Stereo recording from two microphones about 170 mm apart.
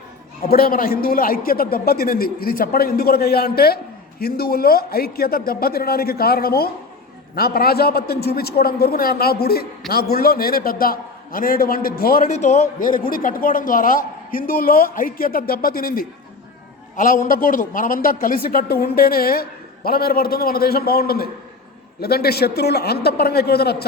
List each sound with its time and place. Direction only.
0.4 s a man's voice: 60° left (ahead or behind)
12.3 s a man's voice: 45° left (ahead or behind); by 23.7 s 70° left (ahead or behind)